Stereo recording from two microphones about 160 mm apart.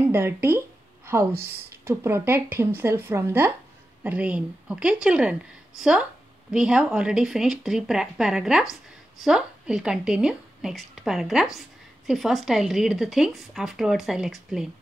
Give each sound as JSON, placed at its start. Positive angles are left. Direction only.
{"t": 0.0, "sound": "speech", "side_deg": -15}
{"t": 1.3, "sound": "a woman's voice", "side_deg": -75}
{"t": 1.9, "sound": "speech", "side_deg": -15}